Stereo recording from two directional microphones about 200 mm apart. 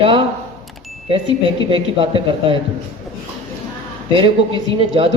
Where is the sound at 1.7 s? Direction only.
25° right (ahead or behind).